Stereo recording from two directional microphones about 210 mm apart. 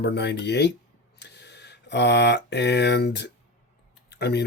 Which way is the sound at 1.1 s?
55° left (ahead or behind).